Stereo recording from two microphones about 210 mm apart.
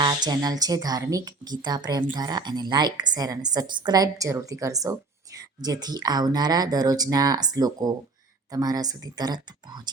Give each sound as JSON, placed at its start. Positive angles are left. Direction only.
{"t": 0.0, "sound": "a woman's voice", "side_deg": -20}